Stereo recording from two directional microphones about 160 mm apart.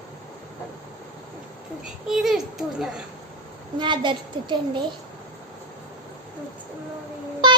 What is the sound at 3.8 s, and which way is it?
A child's voice, 30° right (ahead or behind).